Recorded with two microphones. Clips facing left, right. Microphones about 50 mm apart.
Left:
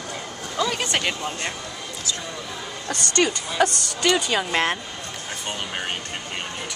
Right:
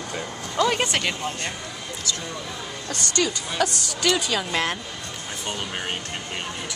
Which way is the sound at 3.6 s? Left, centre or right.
Left.